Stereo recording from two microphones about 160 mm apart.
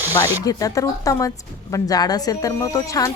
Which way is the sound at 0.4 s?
20° left (ahead or behind).